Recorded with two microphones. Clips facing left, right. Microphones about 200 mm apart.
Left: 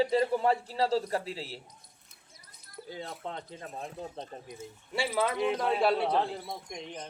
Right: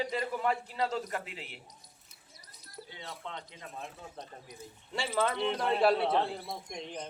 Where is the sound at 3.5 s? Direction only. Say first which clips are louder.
Left 5 dB; 40° left (ahead or behind).